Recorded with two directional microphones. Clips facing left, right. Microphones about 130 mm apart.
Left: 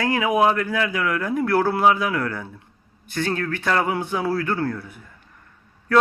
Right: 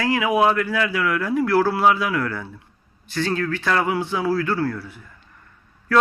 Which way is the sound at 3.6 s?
25° left (ahead or behind).